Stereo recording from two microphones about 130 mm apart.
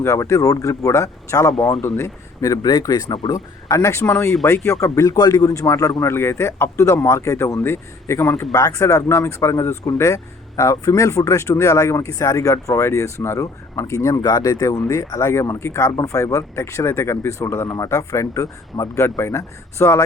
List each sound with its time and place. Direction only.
0.0 s speech: 20° left (ahead or behind)